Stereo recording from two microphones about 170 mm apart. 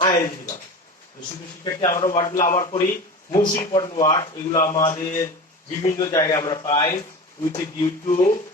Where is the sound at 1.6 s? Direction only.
20° left (ahead or behind).